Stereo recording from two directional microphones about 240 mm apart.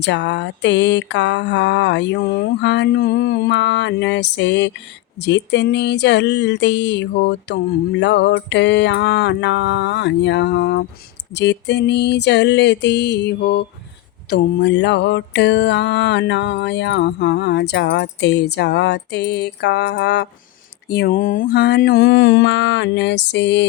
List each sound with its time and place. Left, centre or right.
0.0 s music: left